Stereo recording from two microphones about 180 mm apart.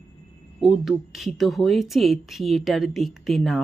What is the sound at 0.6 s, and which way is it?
Speech, centre (ahead or behind).